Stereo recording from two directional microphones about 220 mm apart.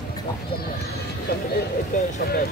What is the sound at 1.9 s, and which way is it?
Speech, 35° left (ahead or behind).